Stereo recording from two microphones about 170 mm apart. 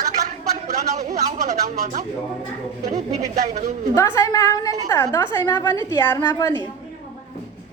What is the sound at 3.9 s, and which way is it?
A woman's voice, 20° left (ahead or behind).